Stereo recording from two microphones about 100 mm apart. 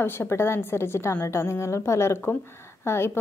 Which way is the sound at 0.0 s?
25° left (ahead or behind).